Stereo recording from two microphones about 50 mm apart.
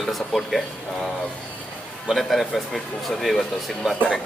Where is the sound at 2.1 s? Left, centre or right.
Centre.